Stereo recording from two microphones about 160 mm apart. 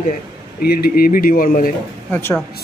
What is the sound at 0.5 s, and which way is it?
Speech, 70° left (ahead or behind).